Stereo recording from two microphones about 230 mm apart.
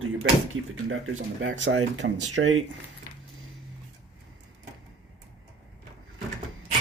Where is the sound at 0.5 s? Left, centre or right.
Right.